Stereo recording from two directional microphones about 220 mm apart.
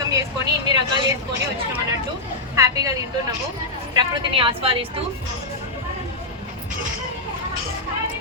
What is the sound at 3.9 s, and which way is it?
Speech, 25° right (ahead or behind).